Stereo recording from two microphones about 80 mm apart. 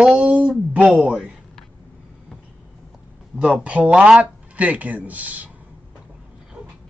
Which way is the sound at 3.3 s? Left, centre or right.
Centre.